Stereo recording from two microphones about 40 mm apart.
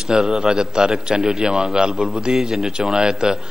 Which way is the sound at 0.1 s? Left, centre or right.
Centre.